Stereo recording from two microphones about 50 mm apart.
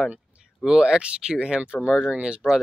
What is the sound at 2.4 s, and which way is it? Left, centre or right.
Speech, centre.